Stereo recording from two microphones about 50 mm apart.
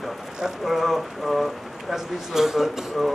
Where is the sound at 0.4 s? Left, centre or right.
Centre.